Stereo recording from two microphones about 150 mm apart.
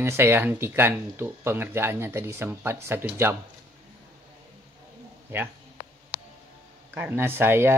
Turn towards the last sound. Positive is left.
turn(degrees=-15)  # may be behind; listen again after turning